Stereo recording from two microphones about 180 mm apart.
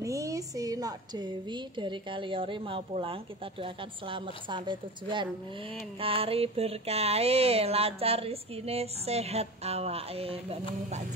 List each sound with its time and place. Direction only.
0.0 s a woman's voice: 20° right (ahead or behind)